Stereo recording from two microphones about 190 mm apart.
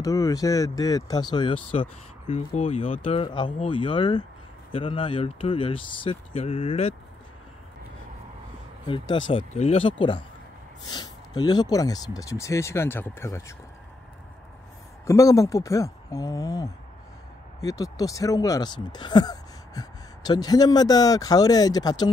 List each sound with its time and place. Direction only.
0.0 s speech: 15° left (ahead or behind)
8.8 s speech: 25° left (ahead or behind)
15.0 s speech: 15° left (ahead or behind)